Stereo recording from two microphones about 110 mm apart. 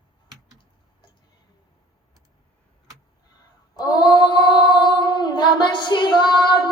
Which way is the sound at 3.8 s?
35° left (ahead or behind).